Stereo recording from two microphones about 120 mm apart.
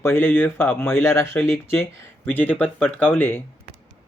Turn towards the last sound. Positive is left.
turn(degrees=15)  # may be behind; listen again after turning